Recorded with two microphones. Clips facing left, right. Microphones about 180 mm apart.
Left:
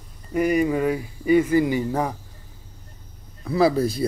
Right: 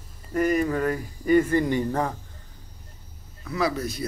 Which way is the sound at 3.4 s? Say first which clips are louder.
Left 7 dB; 30° left (ahead or behind).